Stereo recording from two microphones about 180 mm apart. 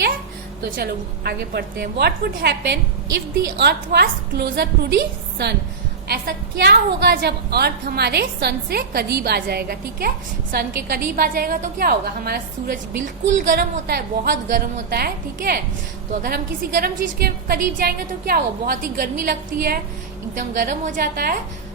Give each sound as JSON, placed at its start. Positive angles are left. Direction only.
{"t": 0.8, "sound": "a woman's voice", "side_deg": -60}